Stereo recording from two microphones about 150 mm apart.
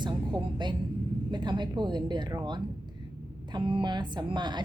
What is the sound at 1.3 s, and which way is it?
A woman's voice, 30° right (ahead or behind).